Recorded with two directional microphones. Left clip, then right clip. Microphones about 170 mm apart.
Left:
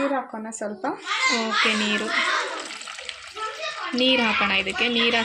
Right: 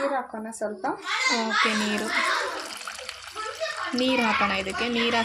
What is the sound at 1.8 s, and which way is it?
Speech, 5° right (ahead or behind).